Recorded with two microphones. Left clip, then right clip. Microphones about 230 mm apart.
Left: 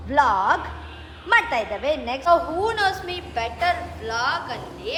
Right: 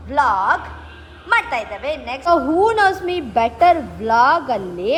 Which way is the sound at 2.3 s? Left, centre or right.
Right.